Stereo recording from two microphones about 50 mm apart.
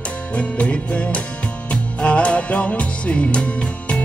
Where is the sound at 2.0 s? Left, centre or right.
Left.